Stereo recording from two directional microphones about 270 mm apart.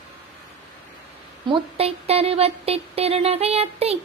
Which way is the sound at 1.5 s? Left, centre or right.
Right.